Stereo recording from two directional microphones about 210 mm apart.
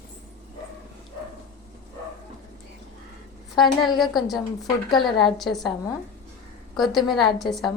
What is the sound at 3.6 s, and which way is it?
Speech, 20° left (ahead or behind).